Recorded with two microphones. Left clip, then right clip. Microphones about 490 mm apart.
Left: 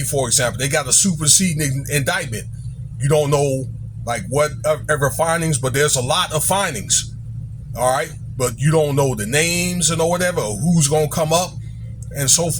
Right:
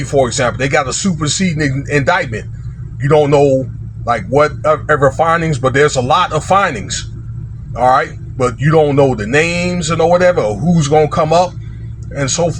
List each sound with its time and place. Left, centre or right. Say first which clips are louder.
0.1 s speech: right 7 dB; left